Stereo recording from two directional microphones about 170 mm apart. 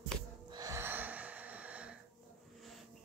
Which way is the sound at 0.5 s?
20° right (ahead or behind).